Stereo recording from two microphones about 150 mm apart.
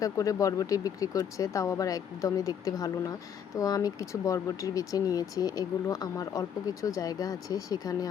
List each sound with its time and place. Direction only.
0.0 s speech: 25° left (ahead or behind)